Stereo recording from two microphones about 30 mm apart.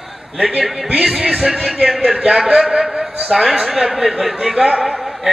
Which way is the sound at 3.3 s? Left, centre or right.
Centre.